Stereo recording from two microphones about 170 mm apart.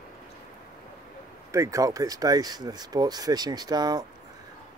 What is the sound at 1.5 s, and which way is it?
Speech, 20° right (ahead or behind).